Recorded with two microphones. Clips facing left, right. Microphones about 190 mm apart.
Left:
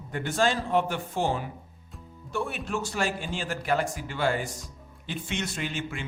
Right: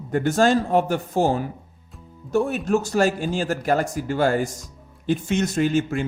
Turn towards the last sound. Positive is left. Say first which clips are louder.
# right 12 dB
turn(degrees=-45)  # may be behind; listen again after turning